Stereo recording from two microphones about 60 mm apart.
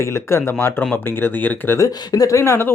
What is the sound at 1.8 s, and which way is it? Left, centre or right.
Speech, left.